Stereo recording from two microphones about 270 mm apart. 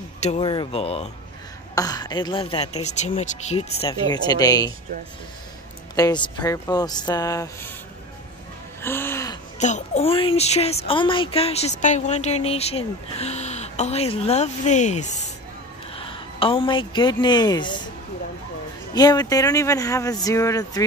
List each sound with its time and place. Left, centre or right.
0.2 s speech: left
5.9 s speech: centre
8.8 s gasp: centre
9.6 s a woman's voice: left
18.9 s speech: centre